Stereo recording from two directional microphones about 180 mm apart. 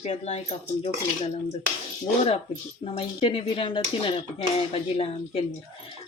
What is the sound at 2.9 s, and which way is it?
Speech, 30° left (ahead or behind).